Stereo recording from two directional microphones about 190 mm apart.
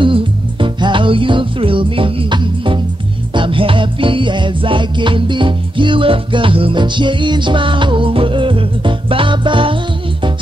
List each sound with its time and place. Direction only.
0.0 s music: 25° right (ahead or behind)